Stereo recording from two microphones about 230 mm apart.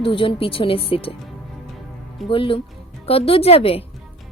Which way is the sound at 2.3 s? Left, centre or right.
Left.